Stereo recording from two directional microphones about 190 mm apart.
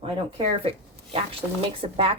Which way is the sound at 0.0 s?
30° right (ahead or behind).